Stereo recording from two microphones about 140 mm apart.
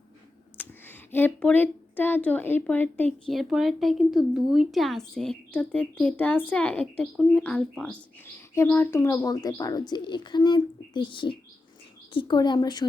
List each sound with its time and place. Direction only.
0.5 s speech: 15° left (ahead or behind); by 12.9 s 30° left (ahead or behind)